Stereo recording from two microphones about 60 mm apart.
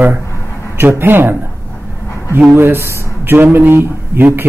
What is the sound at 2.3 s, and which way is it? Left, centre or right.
Speech, right.